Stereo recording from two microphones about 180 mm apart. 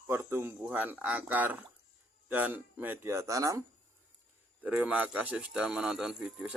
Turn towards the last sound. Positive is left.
turn(degrees=-5)  # may be behind; listen again after turning